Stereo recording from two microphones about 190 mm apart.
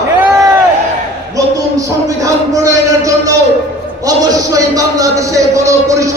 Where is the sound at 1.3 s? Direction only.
20° right (ahead or behind).